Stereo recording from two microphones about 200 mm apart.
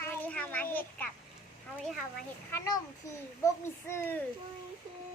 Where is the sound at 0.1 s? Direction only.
10° left (ahead or behind).